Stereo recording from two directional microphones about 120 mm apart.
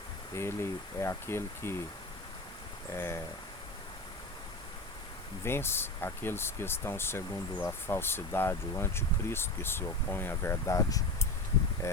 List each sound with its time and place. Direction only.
0.3 s speech: 20° left (ahead or behind)
2.9 s speech: 20° left (ahead or behind)
5.5 s speech: 20° left (ahead or behind)